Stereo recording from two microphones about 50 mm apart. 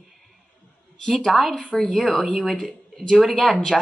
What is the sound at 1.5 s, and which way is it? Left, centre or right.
Speech, centre.